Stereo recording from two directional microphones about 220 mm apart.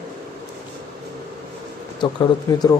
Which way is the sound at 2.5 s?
15° left (ahead or behind).